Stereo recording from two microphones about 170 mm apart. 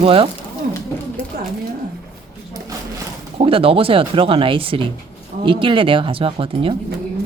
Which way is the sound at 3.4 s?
35° right (ahead or behind).